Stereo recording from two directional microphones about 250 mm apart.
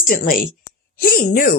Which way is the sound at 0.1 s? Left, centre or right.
Left.